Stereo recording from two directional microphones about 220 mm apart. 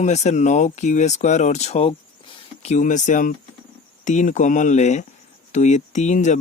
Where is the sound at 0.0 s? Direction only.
30° left (ahead or behind).